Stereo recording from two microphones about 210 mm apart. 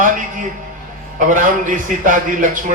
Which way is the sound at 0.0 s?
40° right (ahead or behind).